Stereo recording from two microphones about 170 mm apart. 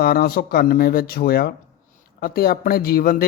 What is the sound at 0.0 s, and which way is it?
Speech, 65° left (ahead or behind).